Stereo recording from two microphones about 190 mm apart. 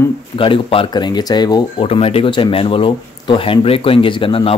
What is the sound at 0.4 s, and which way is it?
Speech, 30° left (ahead or behind).